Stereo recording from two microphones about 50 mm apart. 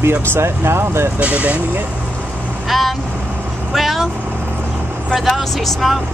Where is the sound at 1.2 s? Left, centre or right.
Right.